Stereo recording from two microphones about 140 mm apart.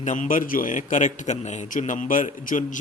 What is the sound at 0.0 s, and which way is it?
A man's voice, 60° left (ahead or behind).